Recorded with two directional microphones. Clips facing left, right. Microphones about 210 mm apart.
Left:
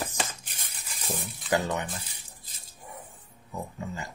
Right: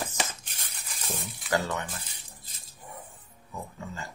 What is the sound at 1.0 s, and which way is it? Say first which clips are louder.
Speech: left 2 dB; 15° left (ahead or behind).